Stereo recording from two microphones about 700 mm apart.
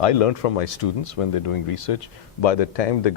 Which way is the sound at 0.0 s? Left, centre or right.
Left.